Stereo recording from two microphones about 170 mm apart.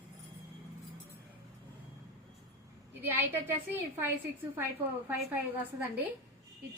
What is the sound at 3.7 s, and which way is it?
Speech, 10° right (ahead or behind).